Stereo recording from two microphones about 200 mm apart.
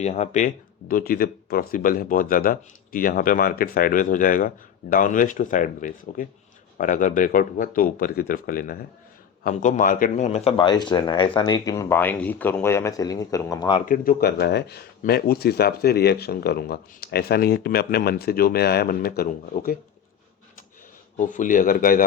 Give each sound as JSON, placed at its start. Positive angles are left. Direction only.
{"t": 0.0, "sound": "speech", "side_deg": 35}
{"t": 13.8, "sound": "speech", "side_deg": 45}
{"t": 21.2, "sound": "speech", "side_deg": 40}